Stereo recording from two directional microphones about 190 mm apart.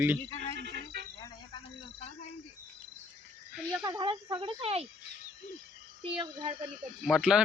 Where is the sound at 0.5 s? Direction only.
60° right (ahead or behind).